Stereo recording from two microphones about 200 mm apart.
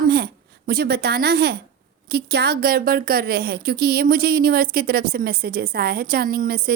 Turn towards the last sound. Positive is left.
turn(degrees=-45)  # may be behind; listen again after turning